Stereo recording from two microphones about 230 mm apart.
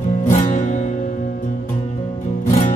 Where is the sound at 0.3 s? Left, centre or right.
Left.